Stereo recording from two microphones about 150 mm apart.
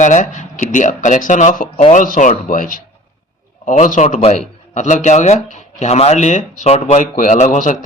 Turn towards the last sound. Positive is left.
turn(degrees=55)  # may be behind; listen again after turning